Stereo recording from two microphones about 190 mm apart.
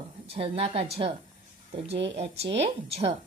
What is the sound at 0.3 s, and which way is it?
Speech, 30° right (ahead or behind).